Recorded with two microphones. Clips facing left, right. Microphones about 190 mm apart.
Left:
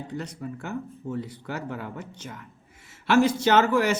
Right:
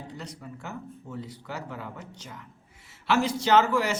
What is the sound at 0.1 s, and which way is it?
A man's voice, 55° left (ahead or behind).